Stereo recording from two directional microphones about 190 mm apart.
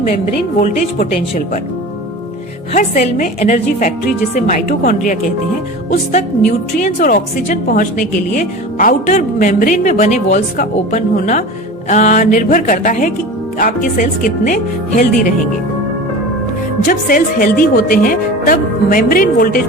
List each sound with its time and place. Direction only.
0.6 s a woman's voice: 50° left (ahead or behind)
2.7 s a woman's voice: 40° left (ahead or behind)
16.8 s a woman's voice: 45° left (ahead or behind)